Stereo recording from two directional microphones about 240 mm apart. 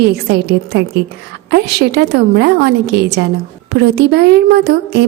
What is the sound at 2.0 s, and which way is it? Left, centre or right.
Speech, right.